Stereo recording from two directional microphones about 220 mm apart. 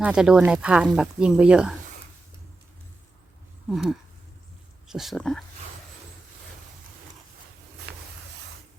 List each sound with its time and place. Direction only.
0.0 s speech: 5° right (ahead or behind)
3.7 s speech: centre (ahead or behind)
7.9 s a sound: 50° right (ahead or behind)